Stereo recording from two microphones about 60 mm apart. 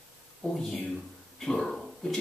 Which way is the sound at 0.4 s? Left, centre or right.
Centre.